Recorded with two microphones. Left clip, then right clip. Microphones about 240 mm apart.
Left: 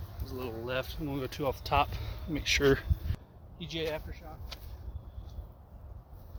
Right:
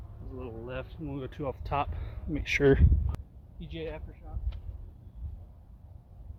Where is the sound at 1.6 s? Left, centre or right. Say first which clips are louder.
Left 3 dB; centre.